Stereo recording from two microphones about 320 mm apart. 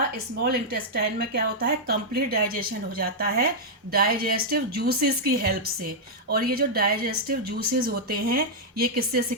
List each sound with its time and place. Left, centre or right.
0.4 s a woman's voice: right